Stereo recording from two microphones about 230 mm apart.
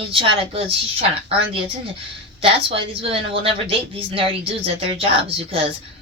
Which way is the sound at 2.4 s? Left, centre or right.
Right.